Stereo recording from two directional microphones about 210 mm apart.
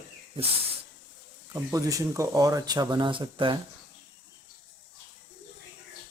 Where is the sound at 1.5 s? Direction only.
15° right (ahead or behind).